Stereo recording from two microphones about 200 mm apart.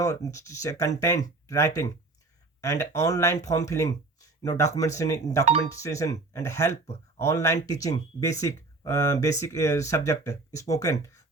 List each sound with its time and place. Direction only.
0.0 s speech: 15° left (ahead or behind)